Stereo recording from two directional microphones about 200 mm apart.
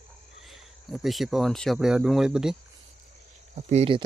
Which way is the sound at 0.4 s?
Centre (ahead or behind).